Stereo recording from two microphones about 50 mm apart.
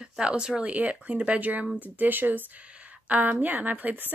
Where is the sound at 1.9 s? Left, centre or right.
Right.